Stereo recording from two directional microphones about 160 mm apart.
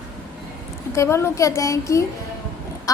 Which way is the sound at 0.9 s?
15° left (ahead or behind).